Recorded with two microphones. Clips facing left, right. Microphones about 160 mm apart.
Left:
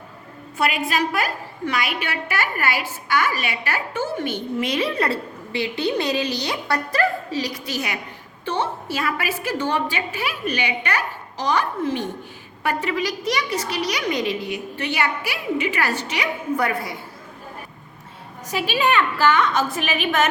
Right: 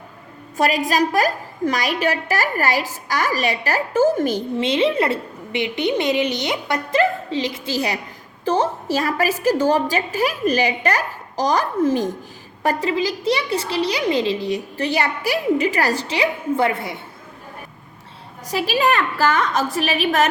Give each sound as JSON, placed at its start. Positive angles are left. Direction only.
{"t": 0.5, "sound": "a woman's voice", "side_deg": -40}
{"t": 8.4, "sound": "a woman's voice", "side_deg": -40}
{"t": 12.6, "sound": "a child's voice", "side_deg": -30}
{"t": 18.5, "sound": "a woman's voice", "side_deg": -40}